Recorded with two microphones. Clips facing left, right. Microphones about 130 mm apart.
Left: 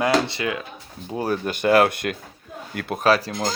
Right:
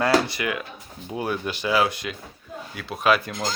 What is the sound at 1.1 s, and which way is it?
Speech, 40° left (ahead or behind).